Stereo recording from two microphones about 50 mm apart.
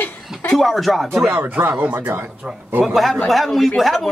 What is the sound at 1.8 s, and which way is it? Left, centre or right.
Speech, right.